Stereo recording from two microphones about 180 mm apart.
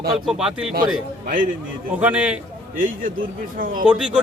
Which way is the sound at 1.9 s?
10° right (ahead or behind).